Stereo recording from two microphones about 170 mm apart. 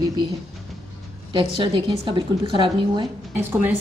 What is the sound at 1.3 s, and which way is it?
A woman's voice, 30° right (ahead or behind).